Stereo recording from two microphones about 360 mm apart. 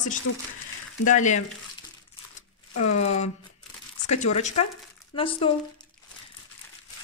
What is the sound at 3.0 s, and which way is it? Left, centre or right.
Speech, centre.